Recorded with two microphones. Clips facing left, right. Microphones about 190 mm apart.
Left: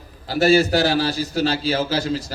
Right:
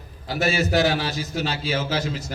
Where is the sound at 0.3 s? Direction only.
35° left (ahead or behind).